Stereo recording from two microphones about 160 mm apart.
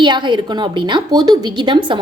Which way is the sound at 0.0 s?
30° right (ahead or behind).